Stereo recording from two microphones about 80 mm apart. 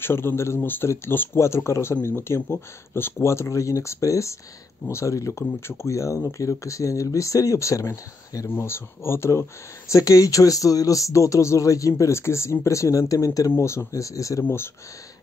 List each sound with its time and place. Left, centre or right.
0.0 s speech: left
8.5 s speech: left
14.4 s speech: left